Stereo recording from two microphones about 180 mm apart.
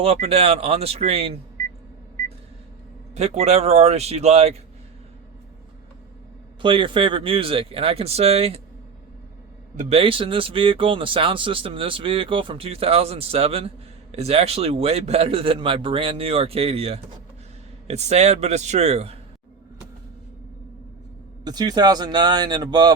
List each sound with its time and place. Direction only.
0.0 s a man's voice: 35° right (ahead or behind)
3.2 s a man's voice: 35° right (ahead or behind)
6.6 s a man's voice: 30° right (ahead or behind)
9.7 s a man's voice: 35° right (ahead or behind)
21.4 s speech: 20° right (ahead or behind)